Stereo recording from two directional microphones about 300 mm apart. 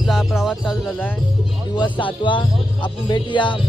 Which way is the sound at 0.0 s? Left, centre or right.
Centre.